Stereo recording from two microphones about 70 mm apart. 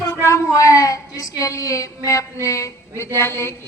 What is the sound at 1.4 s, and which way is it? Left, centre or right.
Female singing, left.